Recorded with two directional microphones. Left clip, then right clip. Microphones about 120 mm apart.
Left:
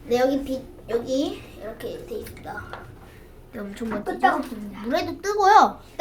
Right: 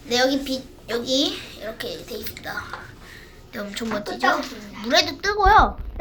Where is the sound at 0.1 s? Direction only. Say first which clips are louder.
Right 1 dB; 20° left (ahead or behind).